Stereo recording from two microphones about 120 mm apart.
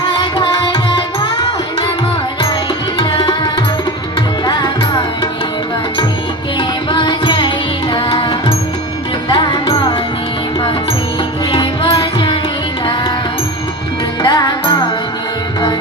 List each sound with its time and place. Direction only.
0.1 s music: 40° left (ahead or behind)
4.5 s music: 40° left (ahead or behind)
6.9 s music: 40° left (ahead or behind)
11.5 s music: 45° left (ahead or behind)
14.2 s music: 35° left (ahead or behind)